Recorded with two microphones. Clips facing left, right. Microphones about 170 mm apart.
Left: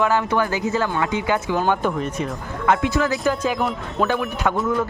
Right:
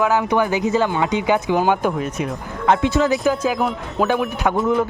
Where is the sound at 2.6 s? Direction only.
25° right (ahead or behind).